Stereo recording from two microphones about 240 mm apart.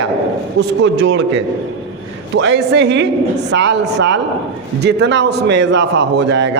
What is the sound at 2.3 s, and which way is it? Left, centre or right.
A man's voice, right.